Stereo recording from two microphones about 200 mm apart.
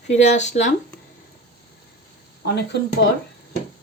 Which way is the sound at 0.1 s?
35° left (ahead or behind).